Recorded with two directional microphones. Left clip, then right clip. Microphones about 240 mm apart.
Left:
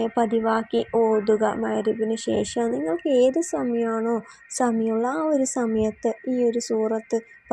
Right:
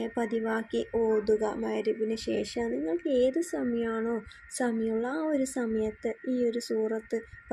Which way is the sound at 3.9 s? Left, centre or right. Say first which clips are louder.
Left 6 dB; centre.